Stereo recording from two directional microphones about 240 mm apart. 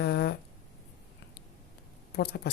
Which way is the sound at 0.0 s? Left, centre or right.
Left.